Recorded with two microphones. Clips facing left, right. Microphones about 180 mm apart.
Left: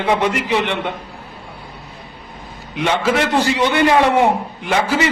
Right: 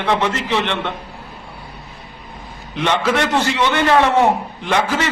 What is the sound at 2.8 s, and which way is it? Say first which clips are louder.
Speech: left 1 dB; 5° left (ahead or behind).